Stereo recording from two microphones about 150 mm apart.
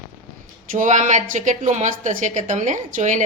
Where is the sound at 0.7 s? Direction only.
55° right (ahead or behind).